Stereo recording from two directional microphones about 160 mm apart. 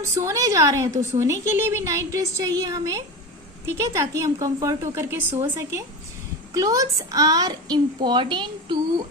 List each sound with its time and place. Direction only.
0.0 s a woman's voice: 20° right (ahead or behind)